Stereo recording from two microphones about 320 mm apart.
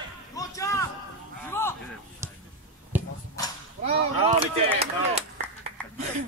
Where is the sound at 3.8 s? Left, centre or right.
Centre.